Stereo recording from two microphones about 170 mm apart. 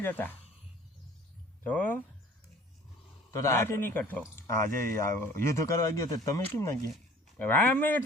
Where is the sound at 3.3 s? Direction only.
20° left (ahead or behind).